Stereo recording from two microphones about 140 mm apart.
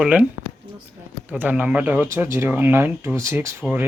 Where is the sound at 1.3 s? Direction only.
10° right (ahead or behind).